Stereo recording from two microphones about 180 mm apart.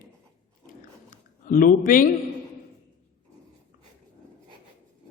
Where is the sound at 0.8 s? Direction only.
45° left (ahead or behind).